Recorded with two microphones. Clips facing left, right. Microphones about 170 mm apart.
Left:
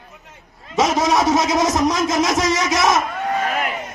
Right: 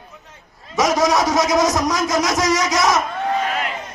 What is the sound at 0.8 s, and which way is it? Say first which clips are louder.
Speech: even; 25° left (ahead or behind).